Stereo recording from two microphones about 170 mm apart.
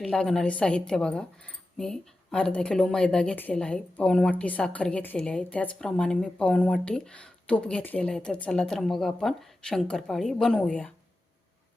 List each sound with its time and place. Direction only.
0.0 s a woman's voice: centre (ahead or behind)